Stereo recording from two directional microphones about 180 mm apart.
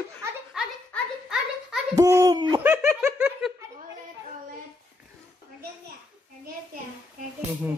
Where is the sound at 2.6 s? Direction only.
15° right (ahead or behind).